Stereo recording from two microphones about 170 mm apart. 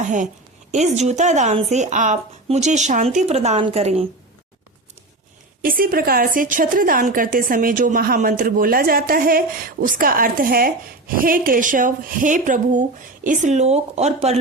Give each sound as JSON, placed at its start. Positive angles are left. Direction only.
{"t": 0.0, "sound": "a woman's voice", "side_deg": -45}
{"t": 5.6, "sound": "a woman's voice", "side_deg": -60}